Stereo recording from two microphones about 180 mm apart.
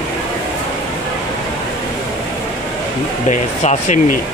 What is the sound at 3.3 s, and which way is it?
Speech, 40° left (ahead or behind).